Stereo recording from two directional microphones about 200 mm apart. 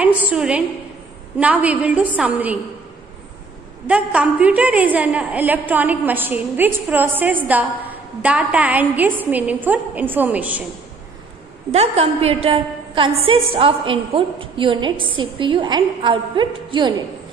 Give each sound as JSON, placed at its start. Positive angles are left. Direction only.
{"t": 0.0, "sound": "a woman's voice", "side_deg": -5}
{"t": 3.8, "sound": "a woman's voice", "side_deg": -5}
{"t": 11.7, "sound": "a woman's voice", "side_deg": -30}